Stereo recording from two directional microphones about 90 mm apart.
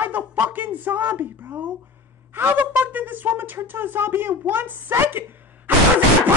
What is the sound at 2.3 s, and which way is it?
Speech, 20° right (ahead or behind).